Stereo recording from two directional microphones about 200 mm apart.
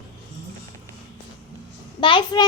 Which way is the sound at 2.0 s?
25° left (ahead or behind).